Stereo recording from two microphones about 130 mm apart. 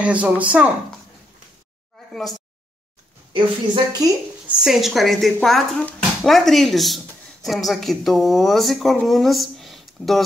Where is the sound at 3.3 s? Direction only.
40° right (ahead or behind).